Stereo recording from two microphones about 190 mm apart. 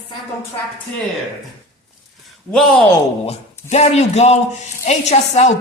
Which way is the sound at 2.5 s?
5° left (ahead or behind).